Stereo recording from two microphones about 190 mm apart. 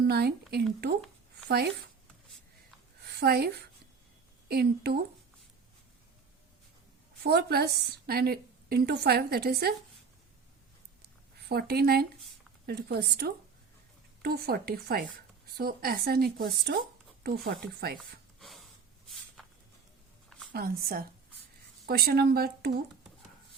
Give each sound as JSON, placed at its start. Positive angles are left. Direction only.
{"t": 0.0, "sound": "a woman's voice", "side_deg": -55}
{"t": 3.0, "sound": "a woman's voice", "side_deg": -55}
{"t": 7.2, "sound": "a woman's voice", "side_deg": -60}
{"t": 11.3, "sound": "a woman's voice", "side_deg": -55}
{"t": 18.3, "sound": "snort", "side_deg": 0}
{"t": 20.5, "sound": "a woman's voice", "side_deg": -50}